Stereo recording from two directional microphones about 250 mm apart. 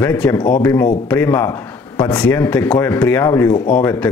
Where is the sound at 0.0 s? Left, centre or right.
Centre.